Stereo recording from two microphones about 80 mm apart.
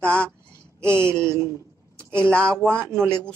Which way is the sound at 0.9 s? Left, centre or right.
Right.